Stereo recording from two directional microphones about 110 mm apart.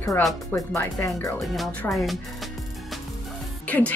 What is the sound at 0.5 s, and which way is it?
Speech, 25° left (ahead or behind).